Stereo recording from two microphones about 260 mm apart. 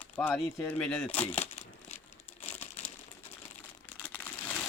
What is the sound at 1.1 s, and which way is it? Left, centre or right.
Speech, left.